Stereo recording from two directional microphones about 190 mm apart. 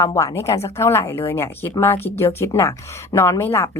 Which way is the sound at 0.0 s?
15° left (ahead or behind).